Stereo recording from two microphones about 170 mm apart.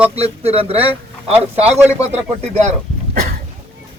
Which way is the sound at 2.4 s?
40° right (ahead or behind).